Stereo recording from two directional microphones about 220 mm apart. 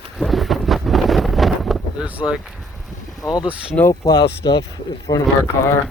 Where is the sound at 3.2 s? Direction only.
20° left (ahead or behind).